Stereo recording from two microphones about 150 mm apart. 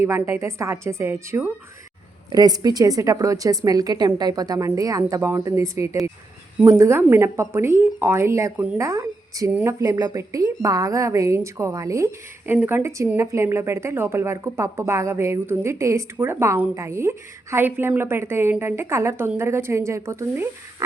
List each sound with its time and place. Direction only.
0.0 s a woman's voice: 15° right (ahead or behind)
9.8 s a woman's voice: 20° right (ahead or behind)